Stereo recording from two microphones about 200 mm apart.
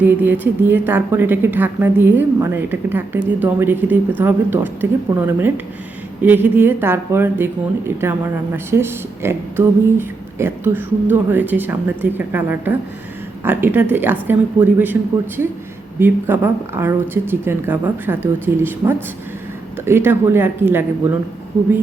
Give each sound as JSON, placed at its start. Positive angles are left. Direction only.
{"t": 0.0, "sound": "speech", "side_deg": -10}
{"t": 16.0, "sound": "speech", "side_deg": -10}